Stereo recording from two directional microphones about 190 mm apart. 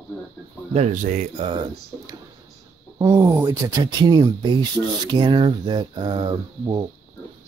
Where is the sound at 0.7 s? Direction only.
30° right (ahead or behind).